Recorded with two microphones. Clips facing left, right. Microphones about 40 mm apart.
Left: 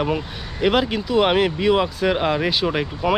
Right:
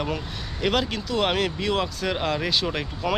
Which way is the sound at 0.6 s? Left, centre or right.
Centre.